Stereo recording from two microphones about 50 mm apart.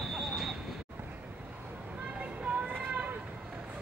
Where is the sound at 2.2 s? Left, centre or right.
Right.